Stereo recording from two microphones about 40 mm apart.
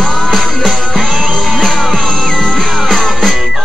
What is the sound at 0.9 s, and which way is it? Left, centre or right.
Music, centre.